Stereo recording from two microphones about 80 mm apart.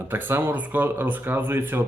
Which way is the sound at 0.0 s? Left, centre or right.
Right.